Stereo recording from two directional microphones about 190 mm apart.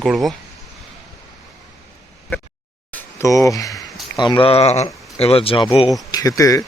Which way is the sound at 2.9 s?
15° left (ahead or behind).